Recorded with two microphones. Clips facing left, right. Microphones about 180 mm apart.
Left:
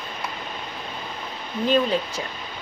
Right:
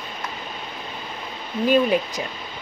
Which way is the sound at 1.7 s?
15° right (ahead or behind).